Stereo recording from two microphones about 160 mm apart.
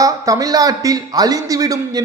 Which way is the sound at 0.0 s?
20° right (ahead or behind).